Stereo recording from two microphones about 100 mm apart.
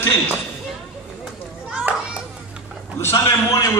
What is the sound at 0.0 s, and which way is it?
Speech, 25° left (ahead or behind).